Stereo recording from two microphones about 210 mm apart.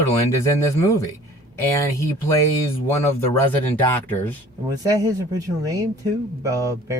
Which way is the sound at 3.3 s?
10° left (ahead or behind).